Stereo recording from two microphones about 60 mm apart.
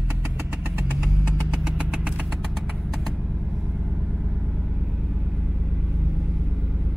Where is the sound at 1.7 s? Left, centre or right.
Centre.